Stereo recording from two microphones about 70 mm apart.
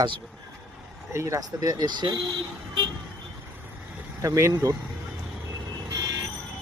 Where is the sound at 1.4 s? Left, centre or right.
Right.